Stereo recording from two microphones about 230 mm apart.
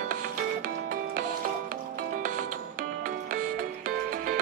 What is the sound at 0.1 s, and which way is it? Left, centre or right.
Music, right.